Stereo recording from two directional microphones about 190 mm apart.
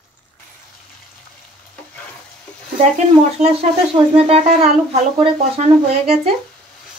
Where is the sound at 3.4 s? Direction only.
35° right (ahead or behind).